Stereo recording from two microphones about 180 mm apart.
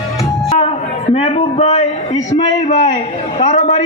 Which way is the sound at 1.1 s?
35° left (ahead or behind).